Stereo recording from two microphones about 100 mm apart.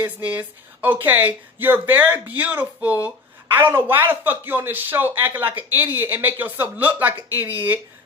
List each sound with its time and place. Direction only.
0.0 s a man's voice: 15° right (ahead or behind)